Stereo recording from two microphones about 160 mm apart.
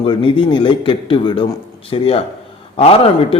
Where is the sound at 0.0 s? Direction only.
30° left (ahead or behind).